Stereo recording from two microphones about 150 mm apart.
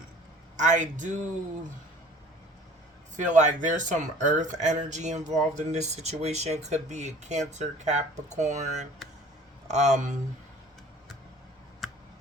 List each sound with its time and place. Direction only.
0.5 s a man's voice: 55° right (ahead or behind)
3.2 s speech: 55° right (ahead or behind)
11.8 s a sound: centre (ahead or behind)